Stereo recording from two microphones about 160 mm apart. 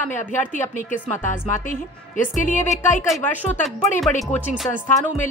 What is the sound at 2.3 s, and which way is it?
Speech, 50° left (ahead or behind).